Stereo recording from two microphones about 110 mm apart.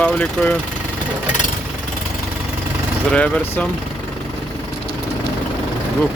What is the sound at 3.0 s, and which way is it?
Speech, 10° left (ahead or behind).